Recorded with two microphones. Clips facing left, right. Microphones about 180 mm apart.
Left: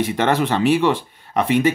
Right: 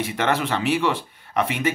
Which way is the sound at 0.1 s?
30° left (ahead or behind).